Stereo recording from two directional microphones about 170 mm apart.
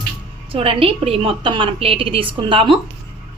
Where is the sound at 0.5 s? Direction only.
35° right (ahead or behind).